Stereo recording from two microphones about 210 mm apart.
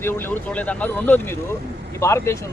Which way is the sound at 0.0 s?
10° left (ahead or behind).